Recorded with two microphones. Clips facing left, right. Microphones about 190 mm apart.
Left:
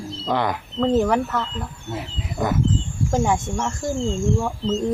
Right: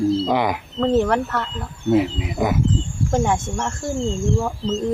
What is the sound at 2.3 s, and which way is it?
Speech, 10° right (ahead or behind).